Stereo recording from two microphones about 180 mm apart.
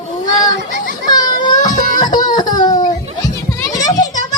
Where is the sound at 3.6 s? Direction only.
20° left (ahead or behind).